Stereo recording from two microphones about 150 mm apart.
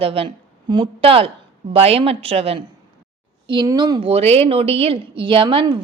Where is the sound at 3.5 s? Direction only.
30° right (ahead or behind).